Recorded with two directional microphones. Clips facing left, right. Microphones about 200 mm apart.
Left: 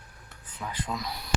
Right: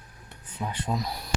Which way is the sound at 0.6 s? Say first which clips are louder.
Right 3 dB; 25° right (ahead or behind).